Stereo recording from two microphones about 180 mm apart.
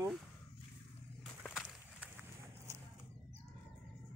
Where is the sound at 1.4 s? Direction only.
5° left (ahead or behind).